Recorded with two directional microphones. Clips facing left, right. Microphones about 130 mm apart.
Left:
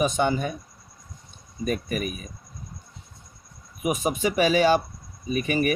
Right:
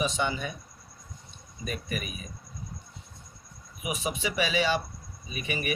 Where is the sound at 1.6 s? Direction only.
45° left (ahead or behind).